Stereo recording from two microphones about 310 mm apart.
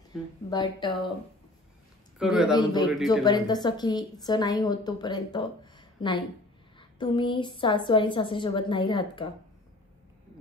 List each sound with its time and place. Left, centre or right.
0.5 s a woman's voice: centre
2.1 s speech: centre
2.6 s a woman's voice: centre